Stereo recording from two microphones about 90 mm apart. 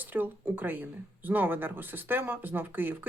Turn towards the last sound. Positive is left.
turn(degrees=-20)  # may be behind; listen again after turning